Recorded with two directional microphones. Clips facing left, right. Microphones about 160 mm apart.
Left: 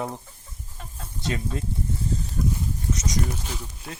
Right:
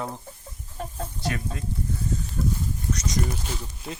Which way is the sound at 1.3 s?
25° left (ahead or behind).